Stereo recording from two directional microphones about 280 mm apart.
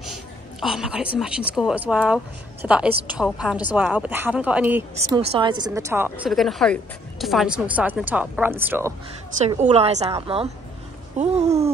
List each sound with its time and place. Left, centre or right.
0.6 s speech: centre
5.2 s a woman's voice: centre
9.5 s a woman's voice: right